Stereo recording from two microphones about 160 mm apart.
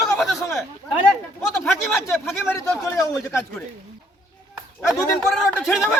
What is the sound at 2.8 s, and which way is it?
Speech, 15° left (ahead or behind).